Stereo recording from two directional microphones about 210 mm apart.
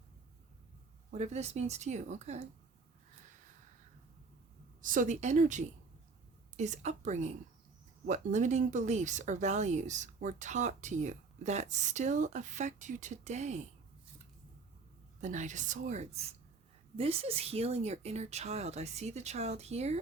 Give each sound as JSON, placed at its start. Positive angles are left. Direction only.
{"t": 1.1, "sound": "speech", "side_deg": -30}
{"t": 4.8, "sound": "speech", "side_deg": -40}
{"t": 15.2, "sound": "speech", "side_deg": -35}